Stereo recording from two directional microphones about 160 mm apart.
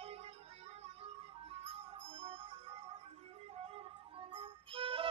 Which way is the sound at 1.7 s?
40° right (ahead or behind).